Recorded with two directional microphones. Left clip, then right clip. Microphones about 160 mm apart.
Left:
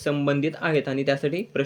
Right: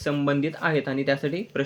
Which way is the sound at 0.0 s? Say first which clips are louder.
Left 1 dB; 15° left (ahead or behind).